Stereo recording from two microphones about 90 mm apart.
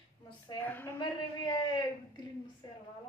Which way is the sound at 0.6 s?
25° left (ahead or behind).